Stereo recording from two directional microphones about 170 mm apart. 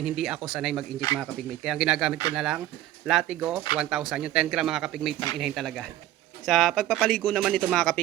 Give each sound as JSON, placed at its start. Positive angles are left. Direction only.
{"t": 0.0, "sound": "speech", "side_deg": -5}